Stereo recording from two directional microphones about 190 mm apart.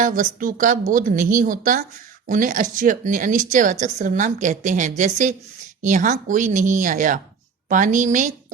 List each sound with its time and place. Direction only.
0.0 s speech: 45° right (ahead or behind)